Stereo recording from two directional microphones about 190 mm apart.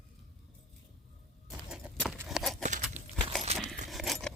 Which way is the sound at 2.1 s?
5° right (ahead or behind).